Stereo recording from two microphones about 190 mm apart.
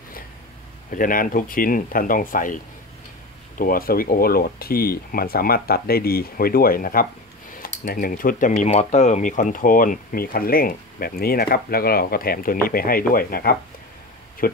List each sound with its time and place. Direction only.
0.9 s speech: 45° left (ahead or behind)